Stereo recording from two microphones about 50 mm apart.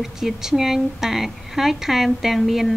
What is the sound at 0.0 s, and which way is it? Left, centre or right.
A woman's voice, centre.